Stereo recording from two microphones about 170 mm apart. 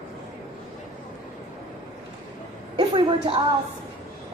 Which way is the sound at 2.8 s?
35° right (ahead or behind).